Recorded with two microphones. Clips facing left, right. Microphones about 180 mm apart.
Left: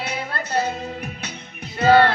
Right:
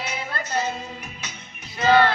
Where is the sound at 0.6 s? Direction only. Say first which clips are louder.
Left 5 dB; 60° left (ahead or behind).